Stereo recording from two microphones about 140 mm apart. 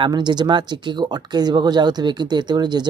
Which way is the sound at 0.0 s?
30° right (ahead or behind).